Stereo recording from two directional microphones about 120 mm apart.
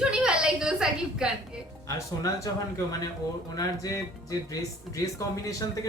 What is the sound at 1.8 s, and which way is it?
Speech, 25° left (ahead or behind).